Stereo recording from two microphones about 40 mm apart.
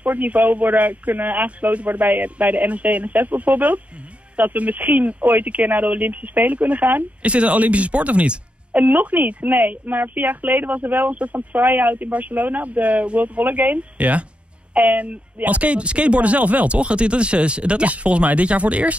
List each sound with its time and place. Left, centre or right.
0.0 s speech: right
7.2 s speech: right
11.3 s speech: right
13.4 s speech: right